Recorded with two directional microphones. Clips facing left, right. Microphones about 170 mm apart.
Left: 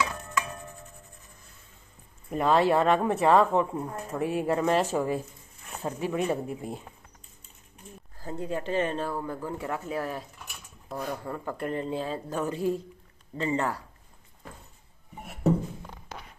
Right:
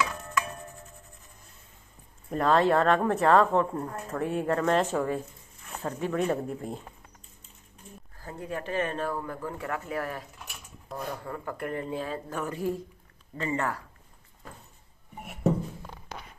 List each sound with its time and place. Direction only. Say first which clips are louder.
2.3 s a woman's voice: even; 5° left (ahead or behind)
8.2 s speech: left 3 dB; 25° left (ahead or behind)
9.1 s speech: left 1 dB; 10° left (ahead or behind)
10.9 s speech: left 2 dB; centre (ahead or behind)
11.2 s speech: left 2 dB; 20° left (ahead or behind)